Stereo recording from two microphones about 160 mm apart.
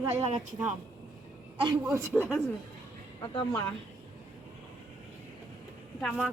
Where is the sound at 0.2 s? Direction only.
45° right (ahead or behind).